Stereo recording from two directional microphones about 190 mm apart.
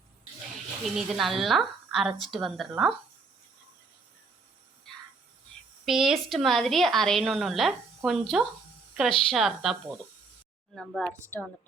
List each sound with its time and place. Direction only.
0.9 s a woman's voice: centre (ahead or behind)
5.8 s a woman's voice: centre (ahead or behind)